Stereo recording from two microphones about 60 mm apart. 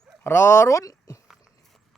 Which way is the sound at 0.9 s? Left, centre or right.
Left.